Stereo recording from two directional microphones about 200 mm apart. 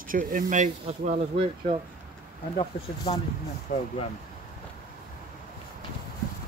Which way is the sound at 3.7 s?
40° left (ahead or behind).